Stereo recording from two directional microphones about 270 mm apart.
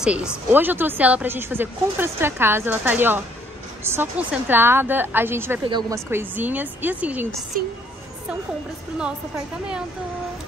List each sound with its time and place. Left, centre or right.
0.0 s speech: centre
7.5 s speech: right